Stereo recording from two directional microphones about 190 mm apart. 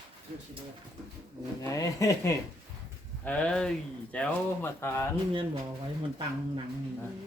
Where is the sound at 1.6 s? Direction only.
15° left (ahead or behind).